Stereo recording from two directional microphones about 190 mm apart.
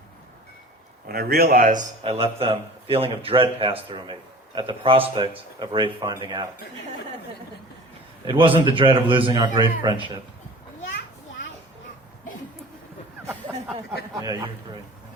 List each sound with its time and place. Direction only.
1.0 s speech: 55° right (ahead or behind)
2.0 s a man's voice: 30° right (ahead or behind)
8.2 s a man's voice: 25° right (ahead or behind)
14.2 s a man's voice: 20° right (ahead or behind)